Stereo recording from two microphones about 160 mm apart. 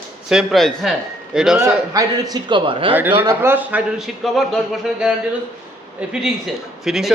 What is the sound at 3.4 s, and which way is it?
Speech, 10° right (ahead or behind).